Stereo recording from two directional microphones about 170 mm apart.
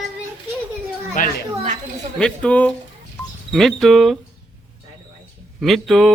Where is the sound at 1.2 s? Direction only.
50° left (ahead or behind).